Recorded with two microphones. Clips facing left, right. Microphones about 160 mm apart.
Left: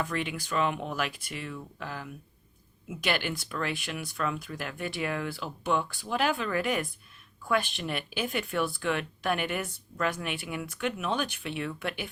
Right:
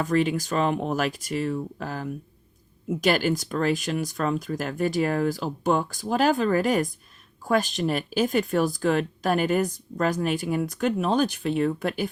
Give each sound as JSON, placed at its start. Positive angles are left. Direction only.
{"t": 0.0, "sound": "speech", "side_deg": -40}